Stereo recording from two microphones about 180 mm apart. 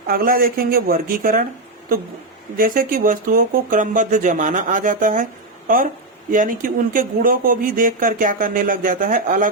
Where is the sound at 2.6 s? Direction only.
50° right (ahead or behind).